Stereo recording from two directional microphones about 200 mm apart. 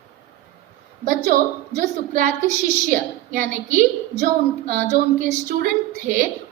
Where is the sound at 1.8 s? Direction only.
50° right (ahead or behind).